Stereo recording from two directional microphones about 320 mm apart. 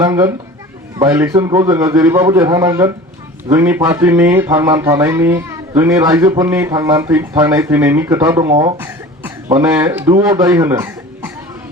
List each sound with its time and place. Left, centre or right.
0.0 s speech: centre